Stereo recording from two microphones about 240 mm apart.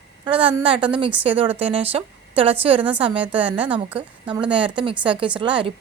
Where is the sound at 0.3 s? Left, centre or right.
Right.